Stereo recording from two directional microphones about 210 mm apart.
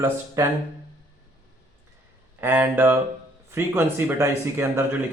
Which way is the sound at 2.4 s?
10° right (ahead or behind).